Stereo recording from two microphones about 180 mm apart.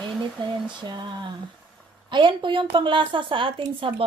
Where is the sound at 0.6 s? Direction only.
25° right (ahead or behind).